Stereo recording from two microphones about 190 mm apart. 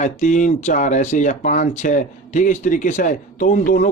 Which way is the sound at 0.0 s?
40° left (ahead or behind).